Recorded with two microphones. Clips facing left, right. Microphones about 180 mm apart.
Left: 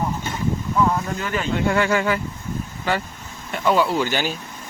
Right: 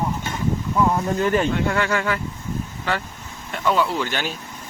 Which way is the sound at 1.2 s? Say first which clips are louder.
Right 6 dB; 30° right (ahead or behind).